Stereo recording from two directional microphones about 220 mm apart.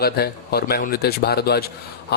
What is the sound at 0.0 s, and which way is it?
A man's voice, 45° left (ahead or behind).